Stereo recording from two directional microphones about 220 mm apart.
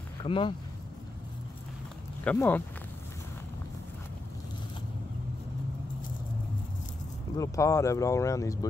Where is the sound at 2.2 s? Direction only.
10° left (ahead or behind).